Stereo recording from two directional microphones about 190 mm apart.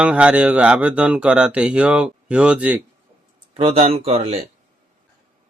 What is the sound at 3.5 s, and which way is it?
Speech, 30° right (ahead or behind).